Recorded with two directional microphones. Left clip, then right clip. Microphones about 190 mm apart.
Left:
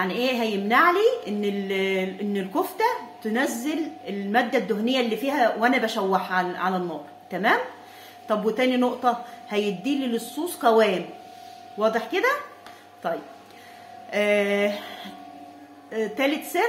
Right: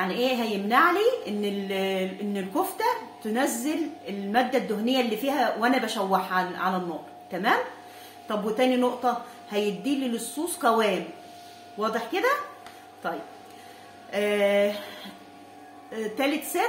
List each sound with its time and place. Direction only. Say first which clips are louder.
0.0 s a woman's voice: left 2 dB; 35° left (ahead or behind)